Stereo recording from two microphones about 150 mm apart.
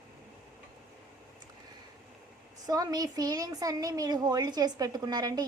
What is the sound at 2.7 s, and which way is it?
A woman's voice, 25° right (ahead or behind).